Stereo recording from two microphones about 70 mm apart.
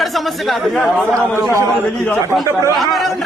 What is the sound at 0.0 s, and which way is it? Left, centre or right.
Speech, centre.